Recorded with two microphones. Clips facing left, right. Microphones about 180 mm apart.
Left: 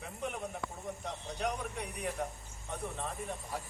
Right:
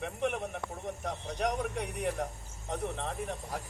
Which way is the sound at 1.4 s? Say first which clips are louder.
Right 5 dB; 80° right.